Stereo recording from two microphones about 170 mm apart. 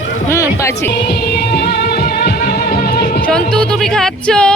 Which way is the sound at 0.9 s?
70° left (ahead or behind).